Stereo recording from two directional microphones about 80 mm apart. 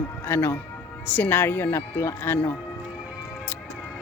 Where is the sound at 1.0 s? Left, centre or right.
Left.